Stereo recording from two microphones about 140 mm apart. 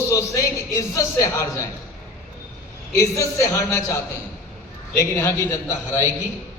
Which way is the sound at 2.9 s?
20° left (ahead or behind).